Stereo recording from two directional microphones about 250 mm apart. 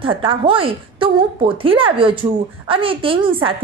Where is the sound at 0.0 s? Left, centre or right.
Right.